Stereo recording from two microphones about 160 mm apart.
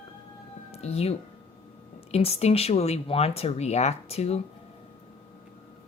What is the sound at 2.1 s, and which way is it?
Speech, 40° left (ahead or behind).